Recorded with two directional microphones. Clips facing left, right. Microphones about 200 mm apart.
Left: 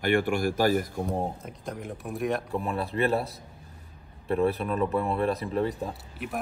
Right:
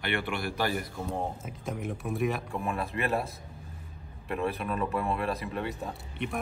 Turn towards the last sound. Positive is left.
turn(degrees=5)  # may be behind; listen again after turning